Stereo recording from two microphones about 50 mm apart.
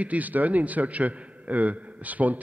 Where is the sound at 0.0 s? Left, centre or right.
Right.